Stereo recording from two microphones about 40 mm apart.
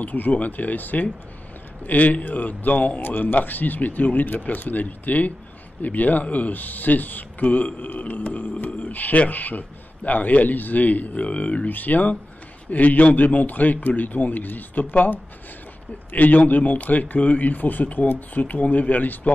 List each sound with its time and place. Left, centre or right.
0.0 s a man's voice: left
3.0 s speech: left
11.7 s speech: left